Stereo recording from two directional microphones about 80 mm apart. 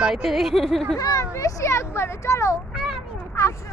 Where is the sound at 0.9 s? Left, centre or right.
Left.